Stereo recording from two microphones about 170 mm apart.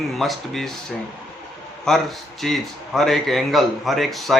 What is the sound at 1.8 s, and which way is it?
A man's voice, centre (ahead or behind).